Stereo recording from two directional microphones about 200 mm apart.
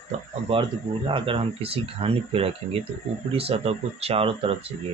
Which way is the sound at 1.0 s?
25° right (ahead or behind).